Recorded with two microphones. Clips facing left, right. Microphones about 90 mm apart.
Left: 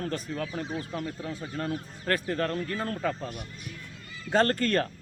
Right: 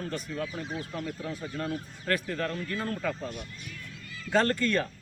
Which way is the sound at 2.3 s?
45° left (ahead or behind).